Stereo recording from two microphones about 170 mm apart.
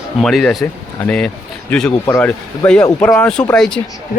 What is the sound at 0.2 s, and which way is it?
Speech, centre (ahead or behind).